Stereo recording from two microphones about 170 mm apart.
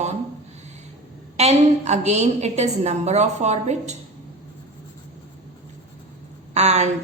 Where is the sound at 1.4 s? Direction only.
40° right (ahead or behind).